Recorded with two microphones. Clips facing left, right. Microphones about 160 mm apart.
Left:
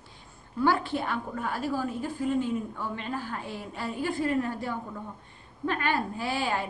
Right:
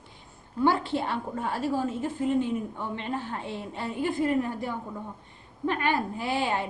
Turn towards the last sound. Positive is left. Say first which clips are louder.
# right 2 dB
turn(degrees=-20)  # may be behind; listen again after turning